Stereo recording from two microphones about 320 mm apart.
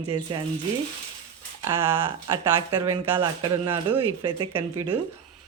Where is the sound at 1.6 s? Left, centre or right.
Centre.